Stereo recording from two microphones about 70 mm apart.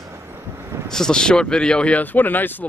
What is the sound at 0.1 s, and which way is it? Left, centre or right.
Vehicle, right.